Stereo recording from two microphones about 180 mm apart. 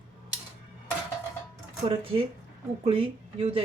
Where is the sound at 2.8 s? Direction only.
30° right (ahead or behind).